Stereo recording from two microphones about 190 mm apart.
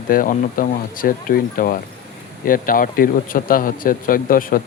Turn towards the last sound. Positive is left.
turn(degrees=50)  # may be behind; listen again after turning